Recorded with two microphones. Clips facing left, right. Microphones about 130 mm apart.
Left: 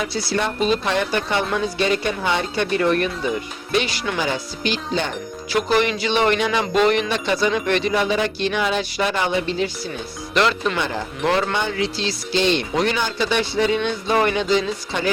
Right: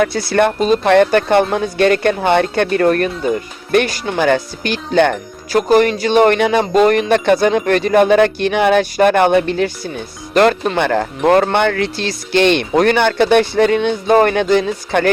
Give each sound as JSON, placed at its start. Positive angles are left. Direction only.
{"t": 0.0, "sound": "speech", "side_deg": -55}
{"t": 5.5, "sound": "speech", "side_deg": -45}
{"t": 10.8, "sound": "speech", "side_deg": -65}
{"t": 11.2, "sound": "speech", "side_deg": -50}
{"t": 11.5, "sound": "speech", "side_deg": -65}